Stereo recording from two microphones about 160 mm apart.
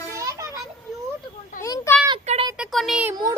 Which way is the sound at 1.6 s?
20° left (ahead or behind).